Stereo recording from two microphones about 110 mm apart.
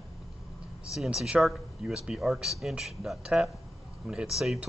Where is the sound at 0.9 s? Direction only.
5° right (ahead or behind).